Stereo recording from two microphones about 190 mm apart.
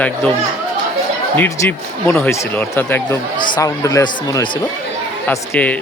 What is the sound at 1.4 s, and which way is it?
Speech, 10° left (ahead or behind).